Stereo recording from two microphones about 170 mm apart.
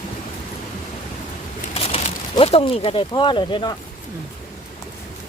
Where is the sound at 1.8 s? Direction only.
35° left (ahead or behind).